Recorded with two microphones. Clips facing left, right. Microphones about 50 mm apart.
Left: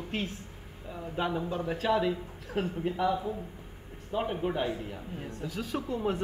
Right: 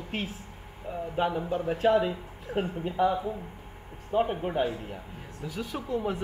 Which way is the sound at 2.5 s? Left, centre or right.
Centre.